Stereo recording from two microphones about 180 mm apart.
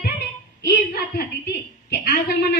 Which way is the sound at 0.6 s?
60° left (ahead or behind).